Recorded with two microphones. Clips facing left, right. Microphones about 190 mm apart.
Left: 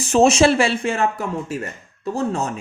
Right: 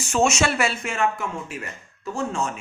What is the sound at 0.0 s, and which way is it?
Speech, 35° left (ahead or behind).